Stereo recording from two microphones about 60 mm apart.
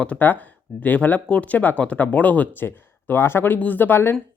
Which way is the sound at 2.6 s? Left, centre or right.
Left.